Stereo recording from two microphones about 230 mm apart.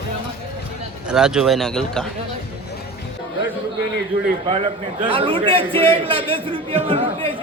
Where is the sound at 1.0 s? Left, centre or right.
Centre.